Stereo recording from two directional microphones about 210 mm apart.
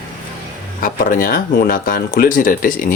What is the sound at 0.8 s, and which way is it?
Speech, 40° left (ahead or behind).